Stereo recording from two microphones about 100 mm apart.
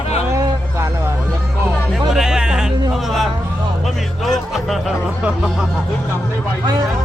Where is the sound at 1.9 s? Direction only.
5° right (ahead or behind).